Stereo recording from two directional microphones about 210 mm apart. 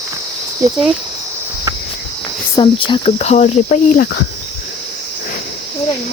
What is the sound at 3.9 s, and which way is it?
Speech, 50° left (ahead or behind).